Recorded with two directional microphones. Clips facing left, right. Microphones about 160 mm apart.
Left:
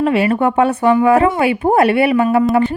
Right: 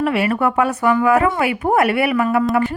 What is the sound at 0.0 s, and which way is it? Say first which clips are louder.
Speech: left 4 dB; 25° left (ahead or behind).